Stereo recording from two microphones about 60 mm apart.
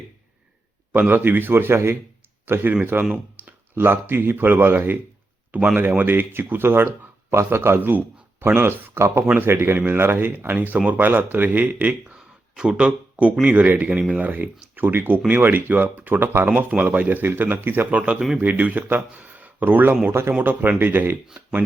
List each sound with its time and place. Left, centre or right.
0.9 s speech: right
5.5 s speech: centre
6.0 s speech: right
9.2 s speech: right
9.5 s speech: right
17.9 s speech: right
20.1 s speech: right
20.4 s speech: right